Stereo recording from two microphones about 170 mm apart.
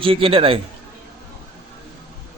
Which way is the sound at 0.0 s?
30° right (ahead or behind).